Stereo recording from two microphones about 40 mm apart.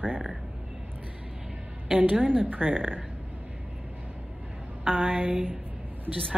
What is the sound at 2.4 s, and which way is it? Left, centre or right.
Speech, right.